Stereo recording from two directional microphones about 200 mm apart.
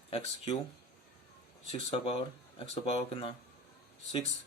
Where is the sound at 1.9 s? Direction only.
30° left (ahead or behind).